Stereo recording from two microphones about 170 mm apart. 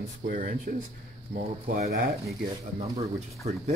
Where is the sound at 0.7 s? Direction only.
50° right (ahead or behind).